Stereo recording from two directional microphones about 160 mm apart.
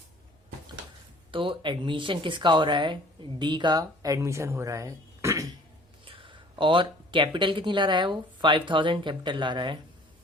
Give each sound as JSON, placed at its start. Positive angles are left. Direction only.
{"t": 1.3, "sound": "speech", "side_deg": -30}
{"t": 6.1, "sound": "speech", "side_deg": -30}